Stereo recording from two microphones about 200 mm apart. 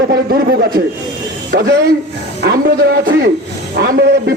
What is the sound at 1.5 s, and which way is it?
A man's voice, 50° right (ahead or behind).